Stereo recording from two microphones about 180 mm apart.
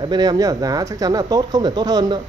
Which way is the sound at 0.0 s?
25° right (ahead or behind).